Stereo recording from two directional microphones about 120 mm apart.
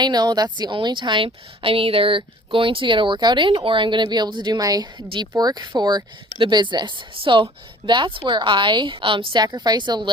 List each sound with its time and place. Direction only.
0.0 s a woman's voice: 35° right (ahead or behind)